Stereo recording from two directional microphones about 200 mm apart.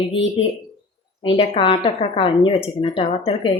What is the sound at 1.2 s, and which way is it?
Speech, 30° left (ahead or behind).